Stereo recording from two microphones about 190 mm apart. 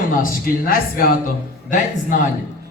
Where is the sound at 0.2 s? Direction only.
50° left (ahead or behind).